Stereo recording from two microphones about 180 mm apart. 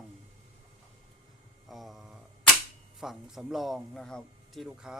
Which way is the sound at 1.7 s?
Centre (ahead or behind).